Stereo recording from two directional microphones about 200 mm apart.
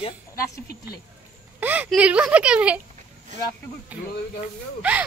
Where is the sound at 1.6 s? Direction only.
10° right (ahead or behind).